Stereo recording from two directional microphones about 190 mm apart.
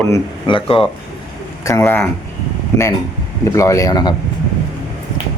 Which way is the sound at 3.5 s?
15° left (ahead or behind).